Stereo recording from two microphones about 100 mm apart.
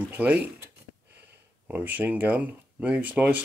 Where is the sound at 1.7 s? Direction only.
15° right (ahead or behind).